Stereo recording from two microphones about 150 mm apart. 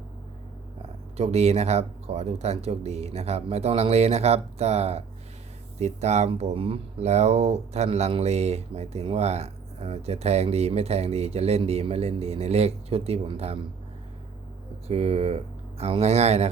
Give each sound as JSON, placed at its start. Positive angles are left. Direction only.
{"t": 1.1, "sound": "speech", "side_deg": -45}
{"t": 14.8, "sound": "speech", "side_deg": -45}